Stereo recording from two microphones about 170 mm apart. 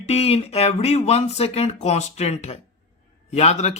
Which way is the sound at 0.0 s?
35° left (ahead or behind).